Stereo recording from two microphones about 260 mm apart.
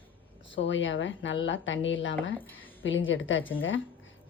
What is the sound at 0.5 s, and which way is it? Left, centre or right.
A woman's voice, left.